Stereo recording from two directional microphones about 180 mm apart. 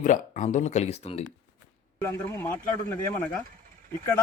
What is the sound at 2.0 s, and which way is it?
A man's voice, 10° left (ahead or behind).